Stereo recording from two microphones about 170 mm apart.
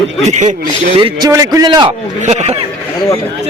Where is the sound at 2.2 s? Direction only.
40° right (ahead or behind).